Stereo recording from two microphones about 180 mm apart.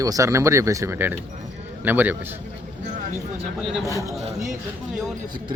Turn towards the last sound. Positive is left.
turn(degrees=-45)  # may be behind; listen again after turning